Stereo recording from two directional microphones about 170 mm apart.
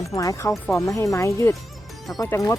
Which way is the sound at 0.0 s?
20° left (ahead or behind).